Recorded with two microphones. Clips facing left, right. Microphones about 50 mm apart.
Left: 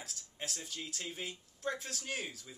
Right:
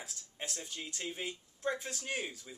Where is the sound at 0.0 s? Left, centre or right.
Centre.